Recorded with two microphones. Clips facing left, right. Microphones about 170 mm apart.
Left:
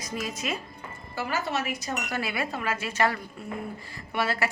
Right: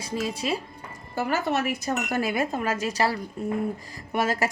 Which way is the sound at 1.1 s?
50° right (ahead or behind).